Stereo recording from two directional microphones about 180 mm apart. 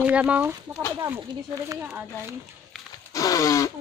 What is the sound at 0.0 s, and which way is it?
Speech, 5° right (ahead or behind).